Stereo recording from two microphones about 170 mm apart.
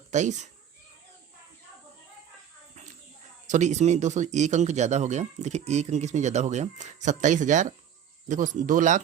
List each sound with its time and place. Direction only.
0.1 s speech: 45° right (ahead or behind)
3.4 s speech: 45° right (ahead or behind)